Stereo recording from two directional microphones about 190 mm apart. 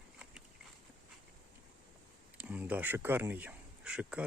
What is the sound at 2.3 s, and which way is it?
Speech, 10° right (ahead or behind).